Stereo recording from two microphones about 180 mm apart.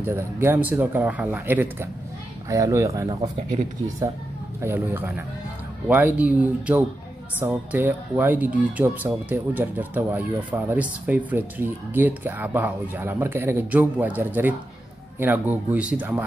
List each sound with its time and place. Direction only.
0.0 s speech: 10° right (ahead or behind)
4.6 s speech: 10° right (ahead or behind)